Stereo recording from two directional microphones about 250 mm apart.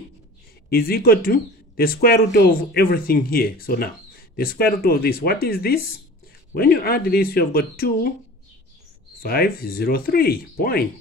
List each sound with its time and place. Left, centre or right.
0.7 s speech: left
9.2 s speech: left